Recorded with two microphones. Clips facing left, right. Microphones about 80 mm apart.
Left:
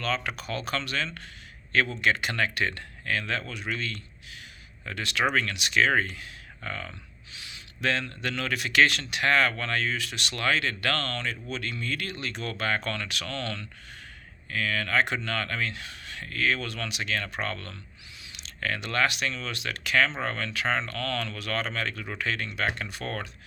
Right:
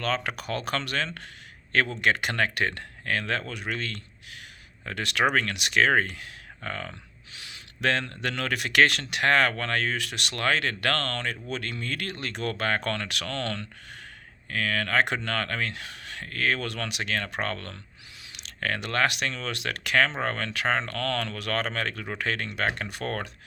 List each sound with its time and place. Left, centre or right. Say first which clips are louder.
0.0 s speech: right 1 dB; right